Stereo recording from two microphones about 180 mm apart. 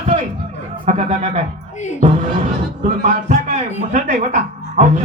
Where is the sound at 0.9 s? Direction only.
40° right (ahead or behind).